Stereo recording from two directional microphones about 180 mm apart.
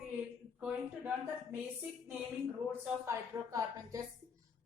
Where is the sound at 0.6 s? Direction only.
5° right (ahead or behind).